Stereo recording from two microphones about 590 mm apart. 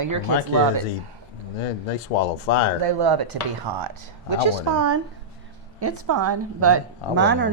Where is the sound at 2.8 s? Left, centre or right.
Right.